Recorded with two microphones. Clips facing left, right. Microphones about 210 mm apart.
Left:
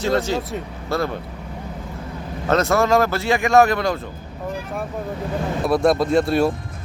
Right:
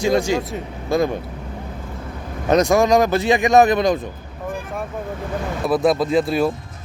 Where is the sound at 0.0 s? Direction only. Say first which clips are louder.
Right 2 dB; 15° right (ahead or behind).